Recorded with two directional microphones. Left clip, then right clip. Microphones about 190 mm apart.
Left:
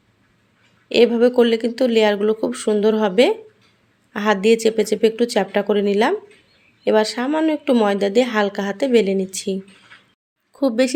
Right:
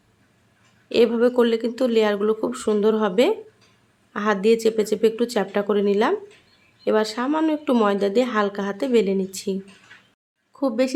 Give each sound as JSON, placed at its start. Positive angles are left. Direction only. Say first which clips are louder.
{"t": 0.9, "sound": "a woman's voice", "louder": "left 4 dB", "side_deg": 15}